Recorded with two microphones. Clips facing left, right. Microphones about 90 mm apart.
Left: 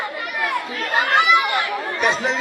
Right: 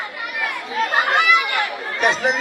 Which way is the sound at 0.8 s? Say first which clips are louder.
Right 2 dB; 25° right (ahead or behind).